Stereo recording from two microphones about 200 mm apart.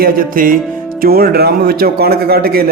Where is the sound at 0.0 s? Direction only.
45° right (ahead or behind).